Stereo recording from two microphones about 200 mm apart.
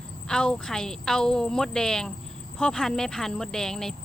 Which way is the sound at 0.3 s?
5° left (ahead or behind).